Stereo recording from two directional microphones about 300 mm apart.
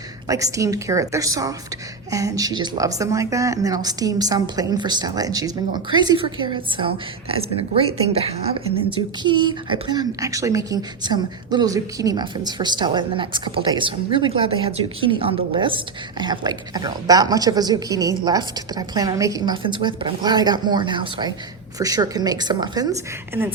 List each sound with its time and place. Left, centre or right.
0.3 s a woman's voice: centre